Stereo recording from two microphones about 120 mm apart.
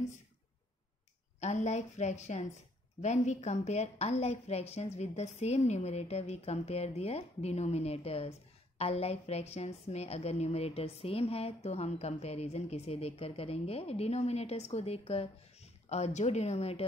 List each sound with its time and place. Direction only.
1.4 s a woman's voice: 70° left (ahead or behind)